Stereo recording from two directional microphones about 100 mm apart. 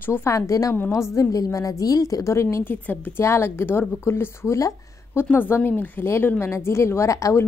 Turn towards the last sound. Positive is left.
turn(degrees=30)  # may be behind; listen again after turning